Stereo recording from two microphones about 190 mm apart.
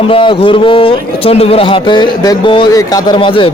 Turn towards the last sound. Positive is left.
turn(degrees=25)  # may be behind; listen again after turning